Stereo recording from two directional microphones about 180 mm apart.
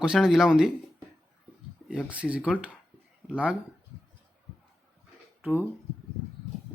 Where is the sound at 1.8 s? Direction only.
5° right (ahead or behind).